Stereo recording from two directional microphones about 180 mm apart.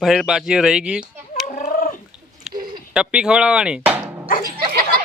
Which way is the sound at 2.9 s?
5° right (ahead or behind).